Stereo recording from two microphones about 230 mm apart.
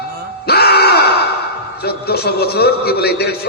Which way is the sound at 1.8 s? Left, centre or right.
Left.